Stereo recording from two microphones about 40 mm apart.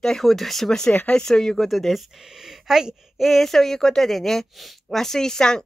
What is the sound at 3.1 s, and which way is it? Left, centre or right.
Speech, centre.